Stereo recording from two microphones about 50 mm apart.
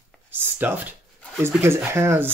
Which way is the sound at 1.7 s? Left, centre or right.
Right.